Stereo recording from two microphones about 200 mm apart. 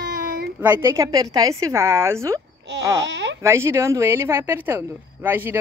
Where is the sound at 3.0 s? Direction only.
65° right (ahead or behind).